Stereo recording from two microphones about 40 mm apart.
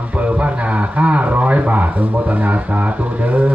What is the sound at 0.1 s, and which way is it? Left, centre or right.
Speech, right.